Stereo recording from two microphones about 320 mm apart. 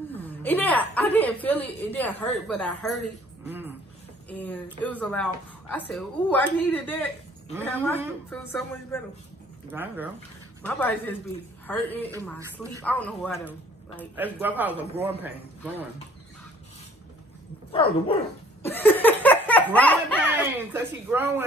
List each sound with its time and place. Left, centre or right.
0.4 s a woman's voice: centre
4.3 s a woman's voice: centre
9.7 s speech: centre
10.6 s a woman's voice: centre
17.7 s speech: centre
18.6 s a sound: centre
20.2 s speech: centre